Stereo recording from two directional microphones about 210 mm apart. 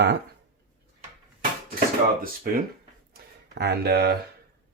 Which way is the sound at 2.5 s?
45° right (ahead or behind).